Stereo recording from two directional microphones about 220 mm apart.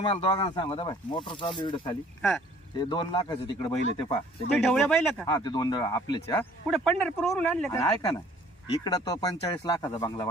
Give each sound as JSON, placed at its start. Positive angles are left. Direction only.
{"t": 0.0, "sound": "speech", "side_deg": 25}
{"t": 4.5, "sound": "speech", "side_deg": 5}
{"t": 5.3, "sound": "speech", "side_deg": 20}